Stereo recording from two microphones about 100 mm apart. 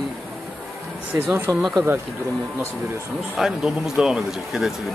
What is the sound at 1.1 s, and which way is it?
Speech, 25° right (ahead or behind).